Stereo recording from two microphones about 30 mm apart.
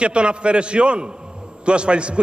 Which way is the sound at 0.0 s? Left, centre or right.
Right.